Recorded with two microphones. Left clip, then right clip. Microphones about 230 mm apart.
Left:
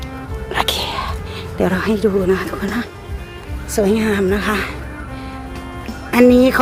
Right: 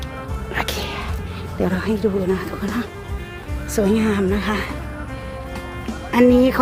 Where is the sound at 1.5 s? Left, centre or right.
Left.